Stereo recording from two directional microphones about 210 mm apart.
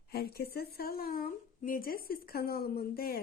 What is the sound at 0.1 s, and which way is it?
Speech, 50° left (ahead or behind).